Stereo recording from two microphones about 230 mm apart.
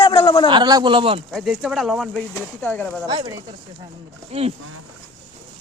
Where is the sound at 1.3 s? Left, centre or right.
Centre.